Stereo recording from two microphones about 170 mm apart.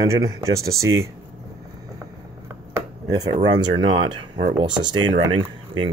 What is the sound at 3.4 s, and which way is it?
Speech, 30° right (ahead or behind).